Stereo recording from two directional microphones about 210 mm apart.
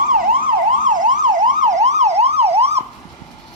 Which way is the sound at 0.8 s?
40° right (ahead or behind).